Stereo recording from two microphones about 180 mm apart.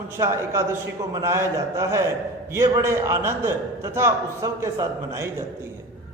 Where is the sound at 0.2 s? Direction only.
15° right (ahead or behind).